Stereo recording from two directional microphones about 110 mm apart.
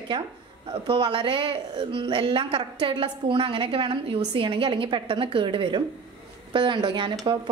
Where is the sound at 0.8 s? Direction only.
50° right (ahead or behind).